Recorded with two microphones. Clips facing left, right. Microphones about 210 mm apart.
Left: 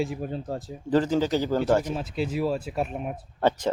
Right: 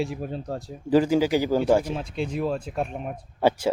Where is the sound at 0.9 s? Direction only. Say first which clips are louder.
Right 3 dB; 10° right (ahead or behind).